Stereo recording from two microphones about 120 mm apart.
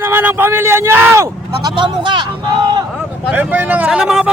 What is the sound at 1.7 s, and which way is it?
Speech, 40° right (ahead or behind).